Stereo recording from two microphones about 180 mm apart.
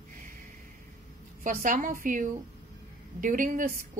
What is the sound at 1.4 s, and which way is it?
A woman's voice, 45° right (ahead or behind).